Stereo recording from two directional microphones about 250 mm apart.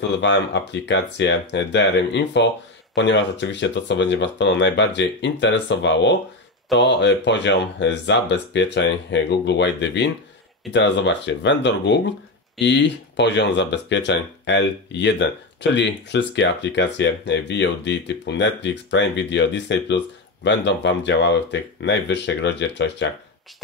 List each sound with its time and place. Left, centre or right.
0.2 s speech: left